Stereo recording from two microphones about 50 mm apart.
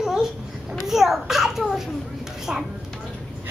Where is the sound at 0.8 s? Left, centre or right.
Centre.